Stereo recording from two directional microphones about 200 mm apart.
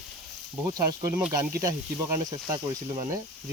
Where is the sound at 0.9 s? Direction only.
15° right (ahead or behind).